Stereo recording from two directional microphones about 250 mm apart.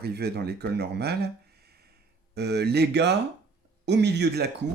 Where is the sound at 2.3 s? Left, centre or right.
Right.